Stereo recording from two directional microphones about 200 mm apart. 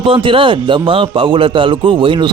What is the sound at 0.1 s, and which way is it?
A man's voice, 25° right (ahead or behind).